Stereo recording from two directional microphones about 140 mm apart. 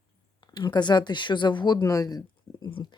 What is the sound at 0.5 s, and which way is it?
Speech, 30° left (ahead or behind).